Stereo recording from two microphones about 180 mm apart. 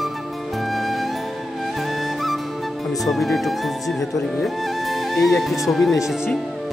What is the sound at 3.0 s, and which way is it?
Speech, centre (ahead or behind).